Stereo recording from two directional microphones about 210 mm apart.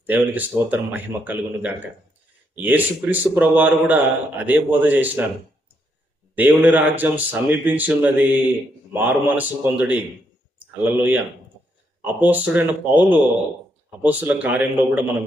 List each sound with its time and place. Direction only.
0.0 s a man's voice: 10° right (ahead or behind)
6.3 s a man's voice: 10° right (ahead or behind)